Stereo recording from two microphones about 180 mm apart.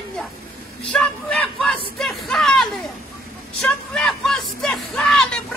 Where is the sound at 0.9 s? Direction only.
5° left (ahead or behind).